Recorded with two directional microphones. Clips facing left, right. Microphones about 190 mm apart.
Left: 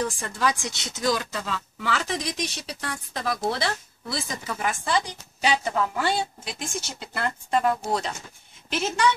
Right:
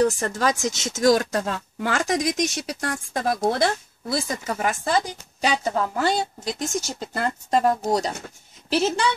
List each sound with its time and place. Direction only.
0.0 s speech: 40° right (ahead or behind)